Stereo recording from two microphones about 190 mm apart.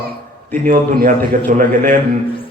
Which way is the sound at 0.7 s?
45° right (ahead or behind).